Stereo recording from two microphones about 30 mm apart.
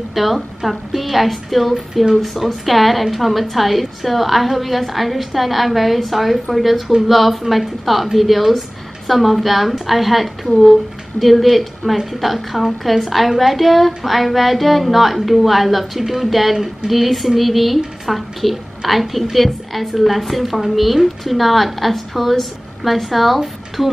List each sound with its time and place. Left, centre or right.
0.1 s a woman's voice: centre
16.5 s a woman's voice: centre
16.9 s a woman's voice: centre